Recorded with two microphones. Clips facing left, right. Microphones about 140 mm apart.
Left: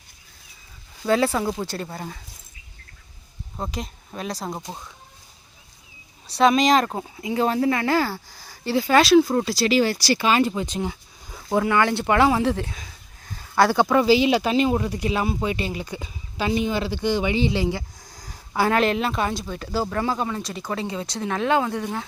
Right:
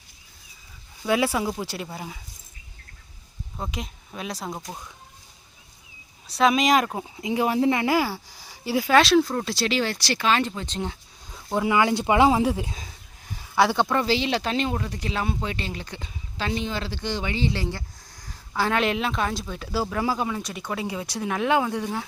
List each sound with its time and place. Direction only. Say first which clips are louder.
1.0 s speech: left 2 dB; 10° right (ahead or behind)
3.6 s speech: left 3 dB; centre (ahead or behind)
4.7 s speech: left 1 dB; 30° left (ahead or behind)
6.2 s speech: left 3 dB; centre (ahead or behind)
7.2 s speech: left 1 dB; 15° right (ahead or behind)
9.0 s speech: left 3 dB; centre (ahead or behind)
11.6 s speech: right 2 dB; 15° right (ahead or behind)
13.3 s speech: left 2 dB; centre (ahead or behind)